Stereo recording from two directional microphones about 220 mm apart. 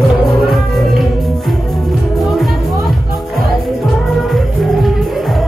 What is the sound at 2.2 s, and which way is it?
Music, centre (ahead or behind).